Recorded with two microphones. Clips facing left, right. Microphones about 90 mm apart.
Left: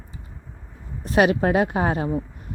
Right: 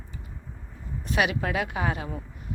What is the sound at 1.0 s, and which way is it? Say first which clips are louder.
A woman's voice: left 8 dB; 40° left (ahead or behind).